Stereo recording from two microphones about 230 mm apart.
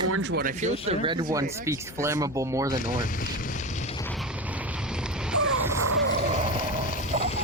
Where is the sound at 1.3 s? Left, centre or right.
Centre.